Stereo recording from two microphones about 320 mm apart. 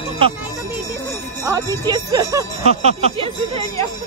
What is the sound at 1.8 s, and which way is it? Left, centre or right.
Speech, centre.